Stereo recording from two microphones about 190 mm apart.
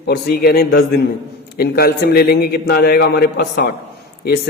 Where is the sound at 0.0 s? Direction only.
60° left (ahead or behind).